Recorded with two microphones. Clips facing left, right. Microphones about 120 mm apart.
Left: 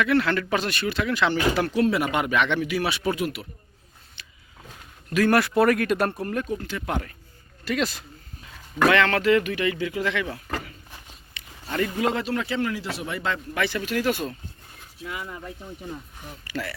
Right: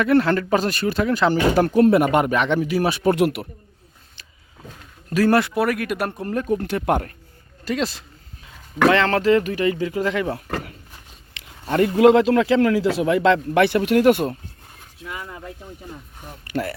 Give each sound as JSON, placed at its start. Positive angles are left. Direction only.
{"t": 0.0, "sound": "speech", "side_deg": -40}
{"t": 3.2, "sound": "a man's voice", "side_deg": -65}
{"t": 5.0, "sound": "speech", "side_deg": -35}
{"t": 5.5, "sound": "speech", "side_deg": -5}
{"t": 6.1, "sound": "speech", "side_deg": -25}
{"t": 6.4, "sound": "speech", "side_deg": -55}
{"t": 7.6, "sound": "a man's voice", "side_deg": -30}
{"t": 16.4, "sound": "speech", "side_deg": -55}